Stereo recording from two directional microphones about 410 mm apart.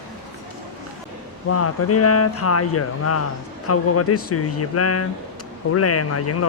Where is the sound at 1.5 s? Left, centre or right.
Left.